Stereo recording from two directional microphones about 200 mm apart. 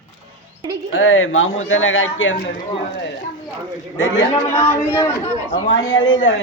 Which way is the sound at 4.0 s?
65° left (ahead or behind).